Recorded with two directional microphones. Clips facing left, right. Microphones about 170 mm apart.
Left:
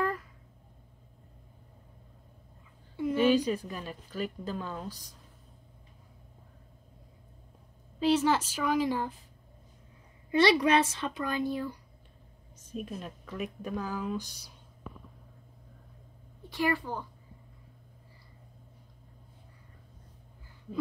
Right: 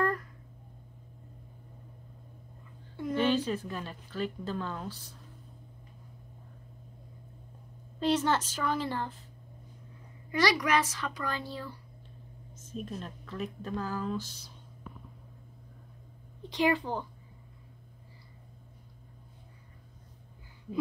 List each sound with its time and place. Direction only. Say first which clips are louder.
0.0 s a sound: right 2 dB; 5° left (ahead or behind)
3.0 s a woman's voice: left 3 dB; 5° left (ahead or behind)
8.0 s speech: left 2 dB; 10° left (ahead or behind)
10.3 s a child's voice: left 4 dB; 25° left (ahead or behind)
12.5 s a sound: left 1 dB; 10° left (ahead or behind)
13.0 s speech: even; 15° left (ahead or behind)
16.4 s speech: right 2 dB; 20° right (ahead or behind)